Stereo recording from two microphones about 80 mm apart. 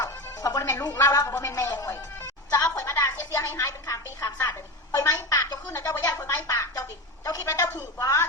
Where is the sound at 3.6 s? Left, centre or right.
Left.